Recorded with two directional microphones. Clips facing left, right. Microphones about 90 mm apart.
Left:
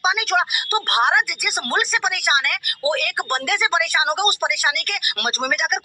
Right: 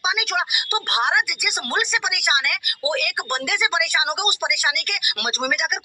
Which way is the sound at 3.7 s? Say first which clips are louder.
Left 3 dB; 35° left (ahead or behind).